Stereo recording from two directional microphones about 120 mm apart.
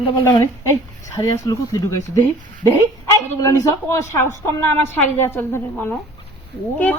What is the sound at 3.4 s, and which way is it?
Speech, 20° left (ahead or behind).